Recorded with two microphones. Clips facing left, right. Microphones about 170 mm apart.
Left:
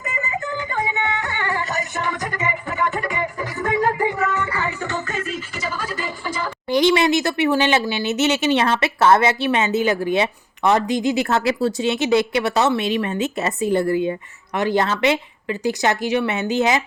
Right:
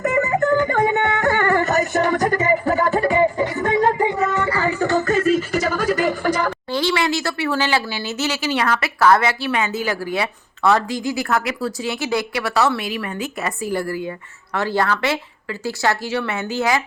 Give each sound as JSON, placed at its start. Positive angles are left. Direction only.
{"t": 0.0, "sound": "music", "side_deg": -65}
{"t": 5.8, "sound": "a sound", "side_deg": -65}
{"t": 6.7, "sound": "speech", "side_deg": 15}